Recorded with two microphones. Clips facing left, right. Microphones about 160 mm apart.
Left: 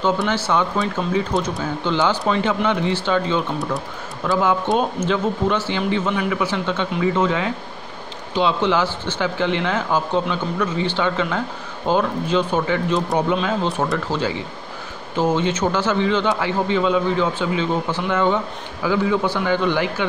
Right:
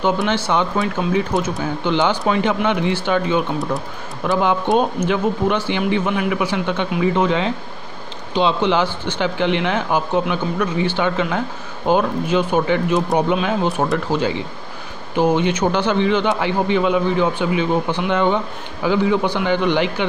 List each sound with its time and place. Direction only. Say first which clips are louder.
0.0 s a man's voice: right 1 dB; 20° right (ahead or behind)
1.0 s speech: right 3 dB; 5° right (ahead or behind)
1.9 s a man's voice: right 2 dB; 15° right (ahead or behind)